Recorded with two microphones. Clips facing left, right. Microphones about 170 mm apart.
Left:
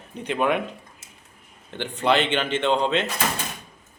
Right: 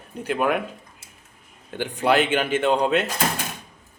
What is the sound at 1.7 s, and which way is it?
A man's voice, 10° right (ahead or behind).